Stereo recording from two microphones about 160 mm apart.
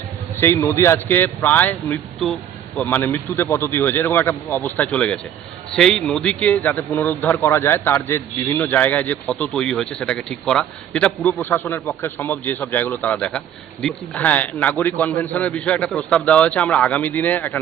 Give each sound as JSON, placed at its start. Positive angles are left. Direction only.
{"t": 0.4, "sound": "speech", "side_deg": 15}